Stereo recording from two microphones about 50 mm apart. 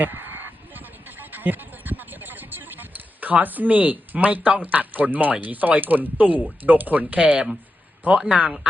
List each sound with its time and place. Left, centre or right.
0.0 s honk: right
1.2 s speech: right